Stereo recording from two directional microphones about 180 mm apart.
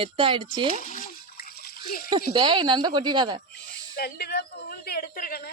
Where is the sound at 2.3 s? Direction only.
25° right (ahead or behind).